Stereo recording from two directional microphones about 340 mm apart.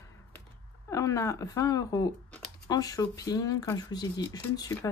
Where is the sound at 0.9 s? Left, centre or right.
Centre.